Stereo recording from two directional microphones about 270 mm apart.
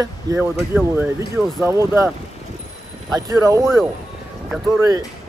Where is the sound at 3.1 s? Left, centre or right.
Centre.